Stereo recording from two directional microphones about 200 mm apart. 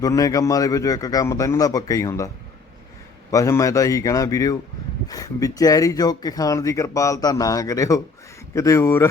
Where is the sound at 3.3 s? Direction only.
15° left (ahead or behind).